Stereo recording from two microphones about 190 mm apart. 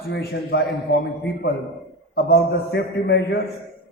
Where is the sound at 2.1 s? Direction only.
60° left (ahead or behind).